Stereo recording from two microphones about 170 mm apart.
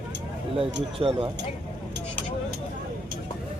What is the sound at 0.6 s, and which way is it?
Speech, 30° right (ahead or behind).